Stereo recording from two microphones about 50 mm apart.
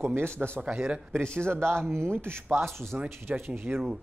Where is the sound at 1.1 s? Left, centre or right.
Centre.